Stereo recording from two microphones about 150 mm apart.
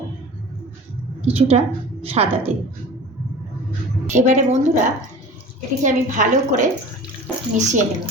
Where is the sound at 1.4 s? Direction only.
45° right (ahead or behind).